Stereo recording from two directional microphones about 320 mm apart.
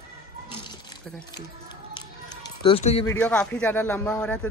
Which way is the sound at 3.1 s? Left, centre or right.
Centre.